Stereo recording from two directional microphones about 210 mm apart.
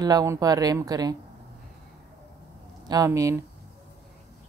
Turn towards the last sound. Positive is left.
turn(degrees=-15)  # may be behind; listen again after turning